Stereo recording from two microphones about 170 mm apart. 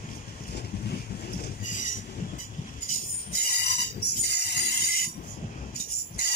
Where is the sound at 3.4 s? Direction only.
70° left (ahead or behind).